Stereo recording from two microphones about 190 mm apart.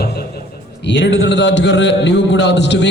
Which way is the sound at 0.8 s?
70° left (ahead or behind).